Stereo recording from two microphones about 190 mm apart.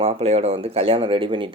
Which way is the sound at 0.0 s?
30° right (ahead or behind).